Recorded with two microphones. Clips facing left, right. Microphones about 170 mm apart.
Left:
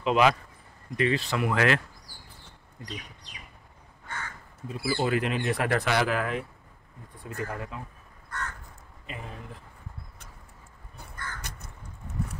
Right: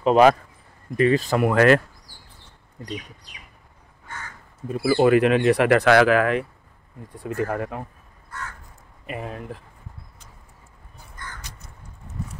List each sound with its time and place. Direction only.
0.0 s speech: 40° right (ahead or behind)
4.6 s speech: 55° right (ahead or behind); by 6.4 s 80° right
7.2 s speech: 60° right (ahead or behind)
9.0 s speech: 65° right (ahead or behind)
11.4 s crow: 55° left (ahead or behind)